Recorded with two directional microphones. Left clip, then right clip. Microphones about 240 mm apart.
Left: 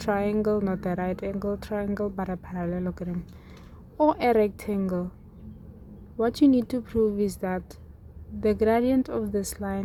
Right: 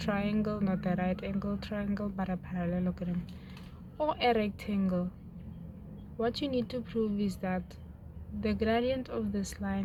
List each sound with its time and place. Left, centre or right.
0.0 s speech: left
6.1 s speech: left